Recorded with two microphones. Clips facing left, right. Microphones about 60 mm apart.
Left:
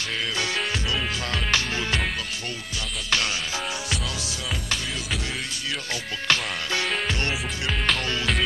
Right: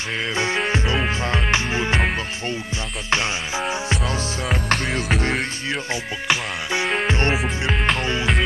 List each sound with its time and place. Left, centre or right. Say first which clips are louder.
0.4 s music: right 8 dB; right
4.5 s music: right 8 dB; right
6.2 s music: right 1 dB; centre